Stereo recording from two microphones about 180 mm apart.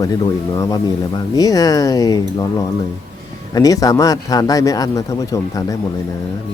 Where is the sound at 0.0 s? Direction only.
20° left (ahead or behind).